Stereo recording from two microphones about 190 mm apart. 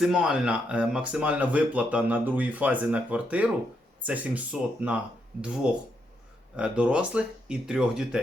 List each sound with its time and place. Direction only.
0.0 s speech: 5° right (ahead or behind)